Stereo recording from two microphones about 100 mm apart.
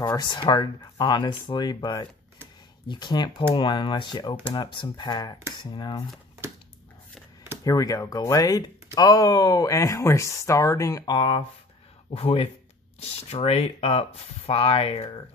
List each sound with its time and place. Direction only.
0.0 s speech: 40° left (ahead or behind)
7.6 s speech: 35° left (ahead or behind)
11.1 s speech: 60° left (ahead or behind)
13.0 s speech: 90° left; by 15.2 s 70° left (ahead or behind)